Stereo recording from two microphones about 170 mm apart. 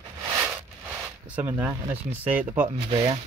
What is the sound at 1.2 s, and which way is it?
Speech, 10° right (ahead or behind).